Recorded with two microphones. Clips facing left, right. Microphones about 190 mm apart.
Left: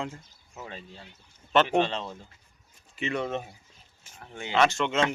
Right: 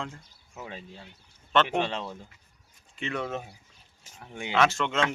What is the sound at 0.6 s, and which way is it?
Speech, 10° right (ahead or behind).